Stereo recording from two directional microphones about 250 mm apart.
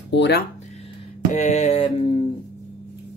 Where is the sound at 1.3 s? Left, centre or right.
Left.